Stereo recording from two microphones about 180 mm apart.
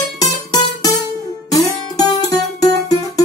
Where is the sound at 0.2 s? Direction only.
20° left (ahead or behind).